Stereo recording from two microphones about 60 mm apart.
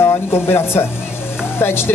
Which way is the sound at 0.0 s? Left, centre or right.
Left.